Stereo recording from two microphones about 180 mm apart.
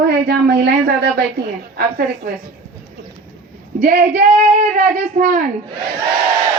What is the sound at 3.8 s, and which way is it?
A woman's voice, 55° right (ahead or behind).